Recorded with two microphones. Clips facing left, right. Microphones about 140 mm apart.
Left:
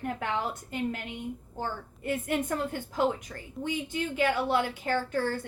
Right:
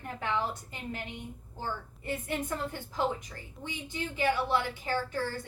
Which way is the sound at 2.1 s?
55° left (ahead or behind).